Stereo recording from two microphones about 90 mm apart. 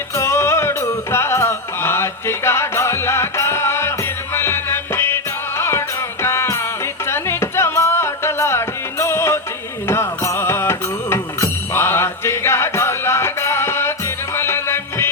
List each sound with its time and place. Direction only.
0.1 s music: 30° left (ahead or behind)